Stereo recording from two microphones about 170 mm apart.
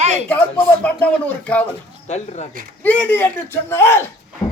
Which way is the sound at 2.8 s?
10° left (ahead or behind).